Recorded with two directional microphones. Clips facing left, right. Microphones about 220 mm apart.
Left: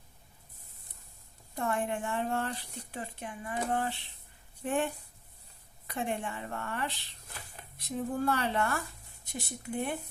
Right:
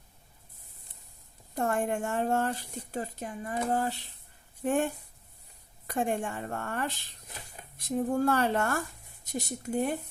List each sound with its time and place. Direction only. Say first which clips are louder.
1.5 s a woman's voice: right 3 dB; 45° right (ahead or behind)
5.9 s a woman's voice: right 4 dB; 45° right (ahead or behind)